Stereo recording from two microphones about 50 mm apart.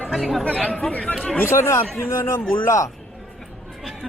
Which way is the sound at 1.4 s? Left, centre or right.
Left.